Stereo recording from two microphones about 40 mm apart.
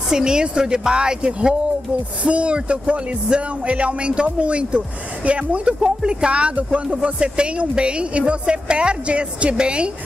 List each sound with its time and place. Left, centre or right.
0.1 s speech: centre